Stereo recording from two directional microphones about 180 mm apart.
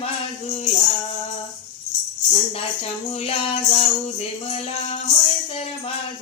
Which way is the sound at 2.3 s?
35° left (ahead or behind).